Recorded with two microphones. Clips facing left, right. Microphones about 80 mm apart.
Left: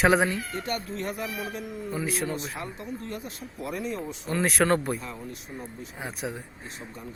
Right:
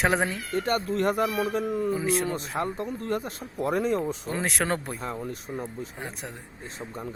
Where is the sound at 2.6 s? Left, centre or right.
Right.